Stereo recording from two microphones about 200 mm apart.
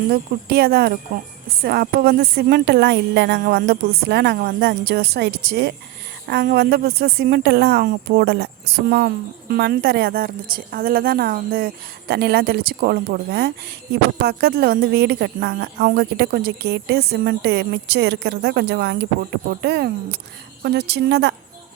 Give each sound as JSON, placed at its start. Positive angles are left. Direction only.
{"t": 0.1, "sound": "a woman's voice", "side_deg": -50}